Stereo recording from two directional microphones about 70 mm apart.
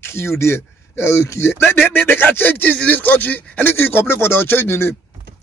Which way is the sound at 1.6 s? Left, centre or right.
Left.